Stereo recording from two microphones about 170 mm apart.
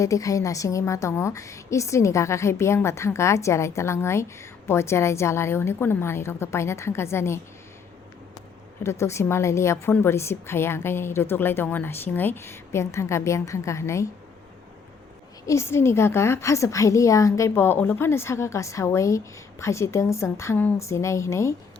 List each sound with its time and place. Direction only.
0.0 s a woman's voice: 20° left (ahead or behind)
8.8 s a woman's voice: 15° left (ahead or behind)
15.4 s a woman's voice: 15° left (ahead or behind)